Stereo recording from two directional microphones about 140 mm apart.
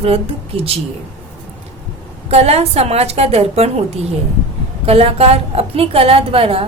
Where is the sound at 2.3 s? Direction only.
45° right (ahead or behind).